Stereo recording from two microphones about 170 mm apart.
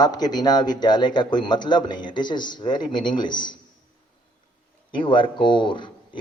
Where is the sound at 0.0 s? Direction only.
25° left (ahead or behind).